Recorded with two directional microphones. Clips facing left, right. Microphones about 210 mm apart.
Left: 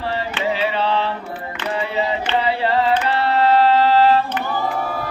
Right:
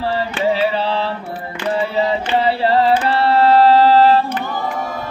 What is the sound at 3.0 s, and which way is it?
Singing, 35° right (ahead or behind).